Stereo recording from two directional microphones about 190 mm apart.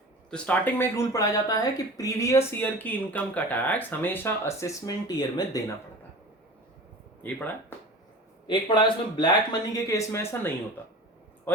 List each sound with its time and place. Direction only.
0.3 s speech: 5° left (ahead or behind)
7.2 s speech: 10° left (ahead or behind)
8.4 s speech: 25° left (ahead or behind)